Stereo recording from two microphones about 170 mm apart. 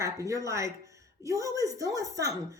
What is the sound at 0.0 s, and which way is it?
A woman's voice, 20° right (ahead or behind).